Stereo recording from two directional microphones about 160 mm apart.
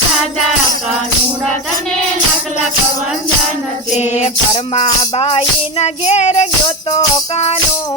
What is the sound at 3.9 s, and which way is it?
Music, 45° left (ahead or behind).